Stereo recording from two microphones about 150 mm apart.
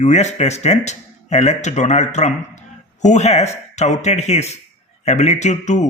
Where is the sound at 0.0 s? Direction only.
50° left (ahead or behind).